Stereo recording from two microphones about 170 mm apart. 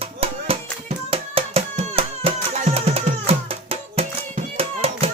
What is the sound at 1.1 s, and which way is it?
Hands, 35° right (ahead or behind).